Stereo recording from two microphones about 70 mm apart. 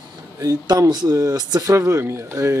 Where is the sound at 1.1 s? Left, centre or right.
Right.